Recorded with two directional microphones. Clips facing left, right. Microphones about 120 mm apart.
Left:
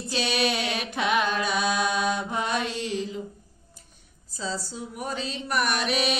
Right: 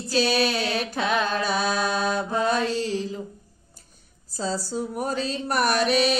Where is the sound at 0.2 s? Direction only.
35° right (ahead or behind).